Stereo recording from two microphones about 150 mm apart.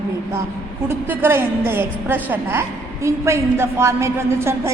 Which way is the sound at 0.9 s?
15° right (ahead or behind).